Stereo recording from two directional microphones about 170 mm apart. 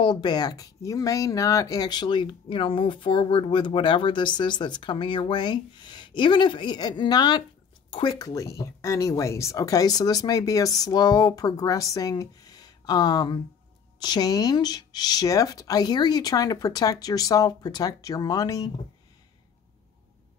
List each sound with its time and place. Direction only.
0.0 s speech: 25° left (ahead or behind)